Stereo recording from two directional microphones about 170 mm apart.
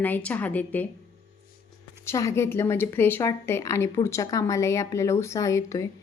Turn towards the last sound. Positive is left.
turn(degrees=15)  # may be behind; listen again after turning